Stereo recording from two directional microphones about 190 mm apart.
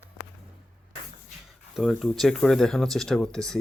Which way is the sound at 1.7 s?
Centre (ahead or behind).